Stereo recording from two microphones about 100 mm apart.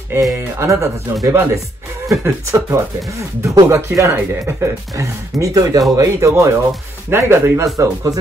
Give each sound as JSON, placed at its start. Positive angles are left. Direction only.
{"t": 0.1, "sound": "speech", "side_deg": -30}